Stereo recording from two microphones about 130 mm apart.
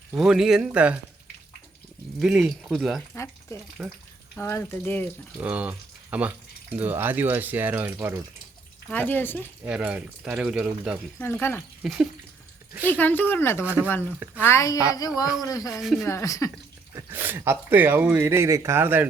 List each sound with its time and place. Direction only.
0.2 s a man's voice: 5° right (ahead or behind)
2.1 s a man's voice: centre (ahead or behind)
4.4 s speech: 20° left (ahead or behind)
5.4 s speech: 10° right (ahead or behind)
8.9 s speech: 15° left (ahead or behind)
9.6 s speech: 10° right (ahead or behind)
11.2 s speech: 15° left (ahead or behind)
11.8 s speech: 5° right (ahead or behind)
12.8 s speech: 15° left (ahead or behind)
15.8 s a man's voice: centre (ahead or behind)
16.0 s speech: 25° left (ahead or behind)
16.9 s speech: 15° right (ahead or behind)